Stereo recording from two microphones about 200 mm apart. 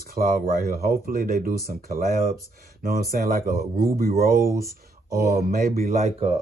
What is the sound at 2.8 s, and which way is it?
Speech, 45° right (ahead or behind).